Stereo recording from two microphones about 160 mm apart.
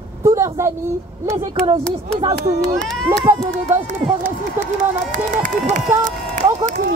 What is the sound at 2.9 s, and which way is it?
Speech, 5° left (ahead or behind).